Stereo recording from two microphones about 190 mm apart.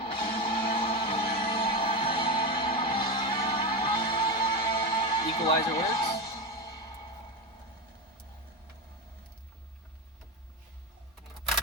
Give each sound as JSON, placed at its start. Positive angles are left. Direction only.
{"t": 0.0, "sound": "music", "side_deg": 25}